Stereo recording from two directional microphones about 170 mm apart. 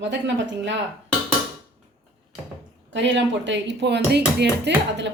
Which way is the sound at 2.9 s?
90° right.